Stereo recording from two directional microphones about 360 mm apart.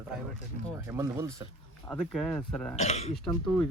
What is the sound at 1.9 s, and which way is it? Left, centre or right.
Speech, centre.